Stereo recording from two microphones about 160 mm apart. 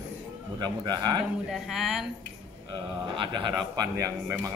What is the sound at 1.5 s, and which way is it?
Speech, 5° right (ahead or behind).